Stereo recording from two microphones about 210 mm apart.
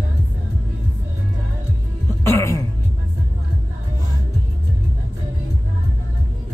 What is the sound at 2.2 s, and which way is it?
Music, 15° left (ahead or behind).